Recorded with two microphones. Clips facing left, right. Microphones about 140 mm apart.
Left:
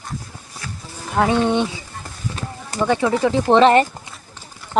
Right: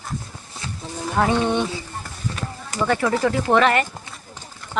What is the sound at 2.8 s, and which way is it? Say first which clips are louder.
Speech: left 2 dB; 15° left (ahead or behind).